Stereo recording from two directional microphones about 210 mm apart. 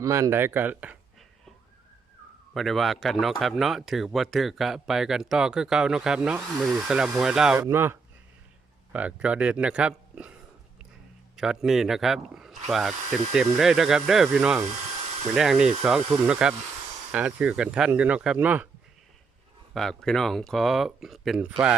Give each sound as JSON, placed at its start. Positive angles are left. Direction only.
{"t": 0.0, "sound": "speech", "side_deg": -15}
{"t": 2.5, "sound": "speech", "side_deg": 0}
{"t": 11.3, "sound": "speech", "side_deg": 0}
{"t": 19.7, "sound": "speech", "side_deg": 0}